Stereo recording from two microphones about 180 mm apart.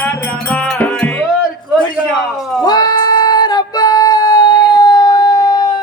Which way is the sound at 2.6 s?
20° left (ahead or behind).